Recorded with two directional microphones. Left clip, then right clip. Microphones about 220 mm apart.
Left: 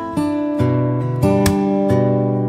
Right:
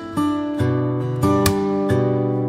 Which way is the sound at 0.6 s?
15° left (ahead or behind).